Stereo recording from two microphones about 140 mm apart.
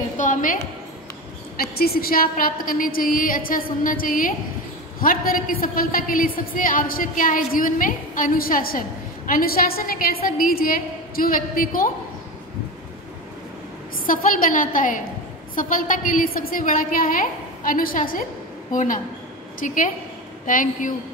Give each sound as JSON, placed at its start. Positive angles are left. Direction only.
{"t": 0.2, "sound": "a woman's voice", "side_deg": 70}
{"t": 1.6, "sound": "a woman's voice", "side_deg": 90}
{"t": 14.0, "sound": "a woman's voice", "side_deg": 80}
{"t": 18.7, "sound": "a woman's voice", "side_deg": 70}